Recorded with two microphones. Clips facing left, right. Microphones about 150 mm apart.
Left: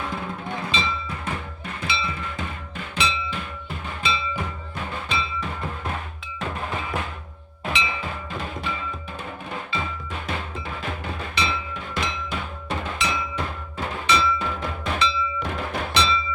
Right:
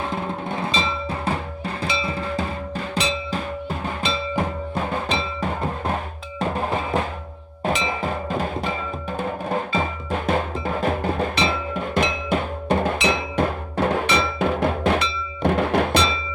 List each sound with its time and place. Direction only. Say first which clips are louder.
0.0 s drum: right 4 dB; 30° right (ahead or behind)
4.0 s music: right 3 dB; 45° right (ahead or behind)
6.4 s drum: right 6 dB; 35° right (ahead or behind)
7.6 s percussion: right 6 dB; 40° right (ahead or behind)
13.3 s music: right 9 dB; 55° right (ahead or behind)